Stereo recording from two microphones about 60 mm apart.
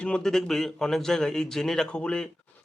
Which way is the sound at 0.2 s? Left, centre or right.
Centre.